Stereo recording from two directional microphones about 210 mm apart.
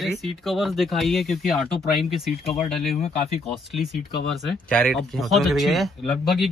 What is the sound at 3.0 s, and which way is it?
Speech, 30° left (ahead or behind).